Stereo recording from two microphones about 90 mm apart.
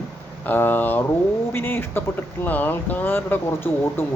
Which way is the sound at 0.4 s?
20° left (ahead or behind).